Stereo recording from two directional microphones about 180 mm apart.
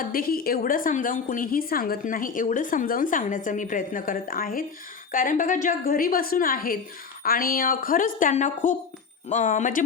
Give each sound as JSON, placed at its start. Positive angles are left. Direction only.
{"t": 0.0, "sound": "a woman's voice", "side_deg": 55}